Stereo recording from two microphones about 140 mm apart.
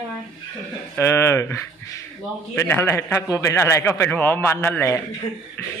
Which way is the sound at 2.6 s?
15° left (ahead or behind).